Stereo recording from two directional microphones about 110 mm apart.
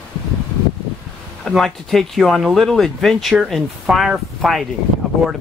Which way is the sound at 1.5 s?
Centre (ahead or behind).